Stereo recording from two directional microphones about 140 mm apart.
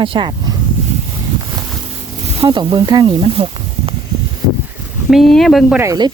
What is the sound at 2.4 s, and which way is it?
Speech, 35° right (ahead or behind).